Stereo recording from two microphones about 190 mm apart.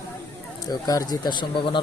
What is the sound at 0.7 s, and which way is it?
Speech, 20° left (ahead or behind).